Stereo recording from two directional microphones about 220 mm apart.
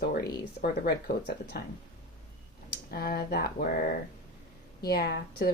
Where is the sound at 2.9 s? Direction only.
45° left (ahead or behind).